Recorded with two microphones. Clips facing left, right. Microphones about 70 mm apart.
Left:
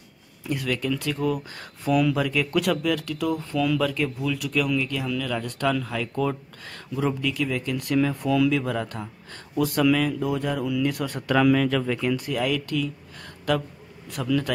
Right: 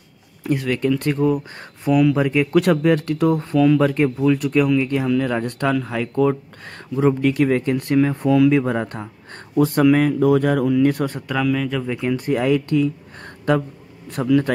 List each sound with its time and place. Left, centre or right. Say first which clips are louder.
0.4 s a sound: right 7 dB; right
0.8 s speech: right 9 dB; right
3.5 s speech: right 8 dB; right
7.2 s speech: right 9 dB; right
8.0 s speech: right 6 dB; right
10.2 s speech: right 10 dB; right
10.6 s speech: right 8 dB; right
11.5 s speech: even; centre
12.0 s speech: right 5 dB; right
14.2 s speech: right 7 dB; right